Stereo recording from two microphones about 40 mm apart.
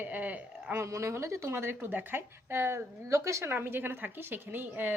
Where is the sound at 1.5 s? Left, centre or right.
Right.